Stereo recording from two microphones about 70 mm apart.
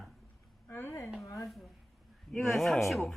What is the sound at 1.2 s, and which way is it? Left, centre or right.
Speech, left.